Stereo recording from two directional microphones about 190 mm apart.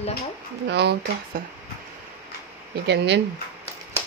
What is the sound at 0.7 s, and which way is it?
Speech, 65° right (ahead or behind).